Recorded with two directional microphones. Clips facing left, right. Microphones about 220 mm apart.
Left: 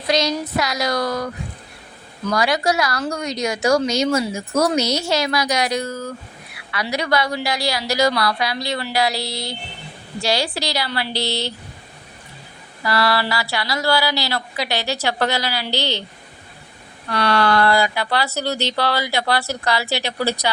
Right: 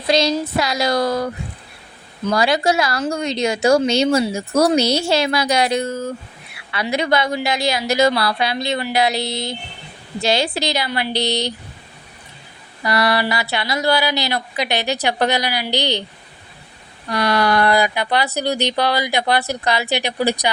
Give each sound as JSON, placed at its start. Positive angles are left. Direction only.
{"t": 0.1, "sound": "speech", "side_deg": -30}
{"t": 12.8, "sound": "speech", "side_deg": -20}
{"t": 17.1, "sound": "a woman's voice", "side_deg": -15}